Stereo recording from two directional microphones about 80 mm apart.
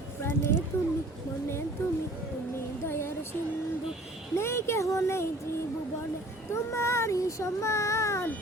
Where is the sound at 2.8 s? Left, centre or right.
Left.